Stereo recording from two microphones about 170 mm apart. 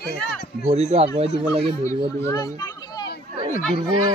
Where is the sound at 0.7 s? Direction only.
40° right (ahead or behind).